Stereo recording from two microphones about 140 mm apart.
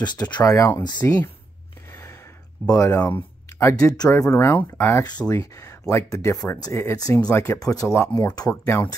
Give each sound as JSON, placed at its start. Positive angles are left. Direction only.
{"t": 0.0, "sound": "speech", "side_deg": 30}
{"t": 0.4, "sound": "speech", "side_deg": 20}
{"t": 1.9, "sound": "a sound", "side_deg": 20}
{"t": 2.7, "sound": "speech", "side_deg": 20}